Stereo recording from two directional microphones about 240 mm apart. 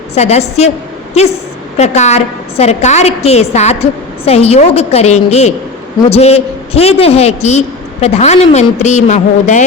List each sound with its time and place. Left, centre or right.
0.1 s a woman's voice: left
1.8 s a woman's voice: left